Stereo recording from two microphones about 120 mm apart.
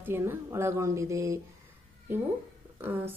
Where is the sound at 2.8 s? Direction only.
15° right (ahead or behind).